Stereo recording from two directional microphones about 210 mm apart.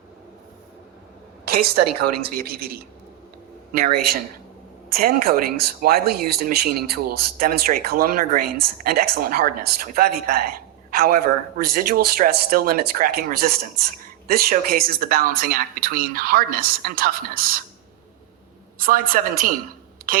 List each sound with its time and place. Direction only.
2.2 s speech: 45° right (ahead or behind)
18.8 s speech: 40° right (ahead or behind)
20.0 s a sound: 45° right (ahead or behind)